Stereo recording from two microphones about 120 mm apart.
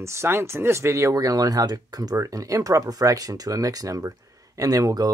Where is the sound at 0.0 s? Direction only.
20° right (ahead or behind).